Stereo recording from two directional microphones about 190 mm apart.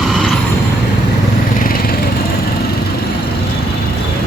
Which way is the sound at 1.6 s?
50° left (ahead or behind).